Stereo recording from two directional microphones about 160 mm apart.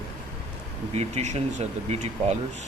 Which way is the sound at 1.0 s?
45° right (ahead or behind).